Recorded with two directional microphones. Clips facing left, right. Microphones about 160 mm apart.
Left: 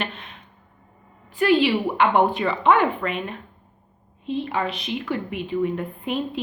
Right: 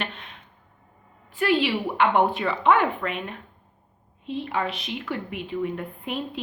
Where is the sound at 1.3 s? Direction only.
Centre (ahead or behind).